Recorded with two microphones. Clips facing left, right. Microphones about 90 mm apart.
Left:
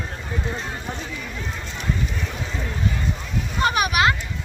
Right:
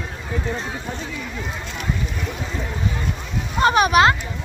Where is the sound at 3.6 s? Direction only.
30° right (ahead or behind).